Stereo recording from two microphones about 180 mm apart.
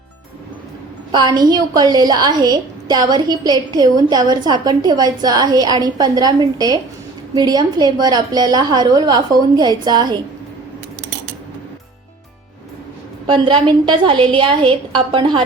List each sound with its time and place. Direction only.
1.1 s a woman's voice: 25° right (ahead or behind)
13.2 s a woman's voice: 25° right (ahead or behind)